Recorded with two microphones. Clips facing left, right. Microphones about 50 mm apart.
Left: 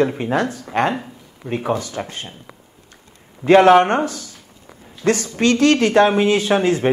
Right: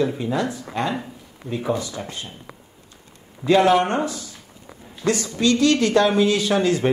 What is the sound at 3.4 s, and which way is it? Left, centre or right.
Speech, left.